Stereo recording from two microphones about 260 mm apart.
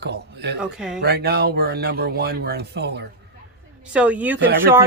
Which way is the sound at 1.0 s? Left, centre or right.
Right.